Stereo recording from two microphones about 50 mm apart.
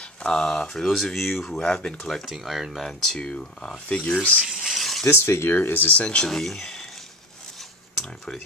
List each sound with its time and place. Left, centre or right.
0.0 s speech: centre
0.8 s speech: centre
1.7 s speech: centre
2.0 s speech: centre
3.2 s speech: centre
4.5 s a sound: centre
5.0 s speech: left
6.0 s speech: centre
6.3 s speech: centre